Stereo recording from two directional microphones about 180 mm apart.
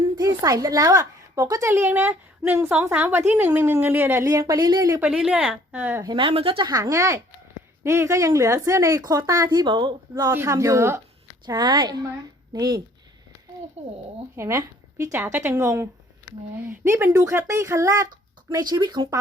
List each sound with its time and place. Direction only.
0.0 s a woman's voice: 20° right (ahead or behind)
5.0 s a woman's voice: 5° right (ahead or behind); by 12.8 s 20° right (ahead or behind)
13.8 s speech: 35° right (ahead or behind)
14.3 s a woman's voice: 15° right (ahead or behind)